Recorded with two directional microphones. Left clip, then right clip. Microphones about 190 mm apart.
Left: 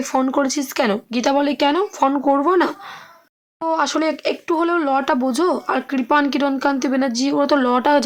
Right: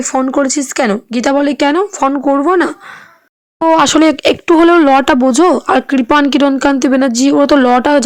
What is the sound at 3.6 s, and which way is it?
Speech, 45° right (ahead or behind).